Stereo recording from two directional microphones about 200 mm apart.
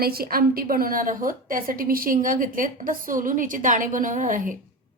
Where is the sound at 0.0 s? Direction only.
50° right (ahead or behind).